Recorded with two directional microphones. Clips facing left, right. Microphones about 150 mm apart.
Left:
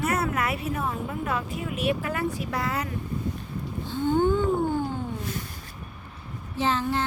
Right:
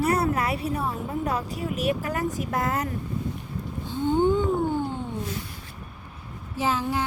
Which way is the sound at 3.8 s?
20° right (ahead or behind).